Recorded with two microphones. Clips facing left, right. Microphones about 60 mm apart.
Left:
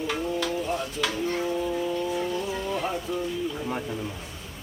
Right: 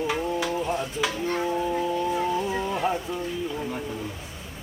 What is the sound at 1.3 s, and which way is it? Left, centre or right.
Music, right.